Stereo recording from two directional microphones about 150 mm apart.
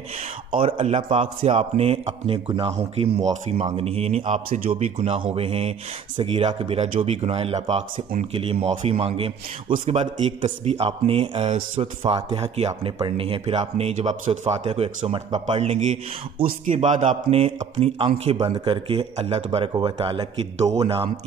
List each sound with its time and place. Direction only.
0.6 s speech: 40° right (ahead or behind)
8.3 s speech: 40° right (ahead or behind)
16.4 s speech: 60° right (ahead or behind)
17.7 s speech: 40° right (ahead or behind)